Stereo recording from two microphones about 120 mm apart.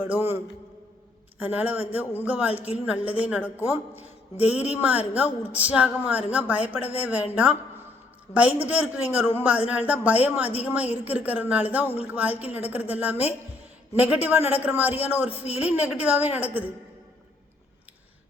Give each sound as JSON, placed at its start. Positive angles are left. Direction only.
{"t": 0.0, "sound": "a woman's voice", "side_deg": -15}
{"t": 1.4, "sound": "a woman's voice", "side_deg": -15}
{"t": 8.3, "sound": "a woman's voice", "side_deg": -15}